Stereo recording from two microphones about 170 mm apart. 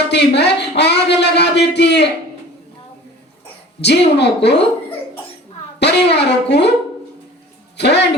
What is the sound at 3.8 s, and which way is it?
Speech, 80° left.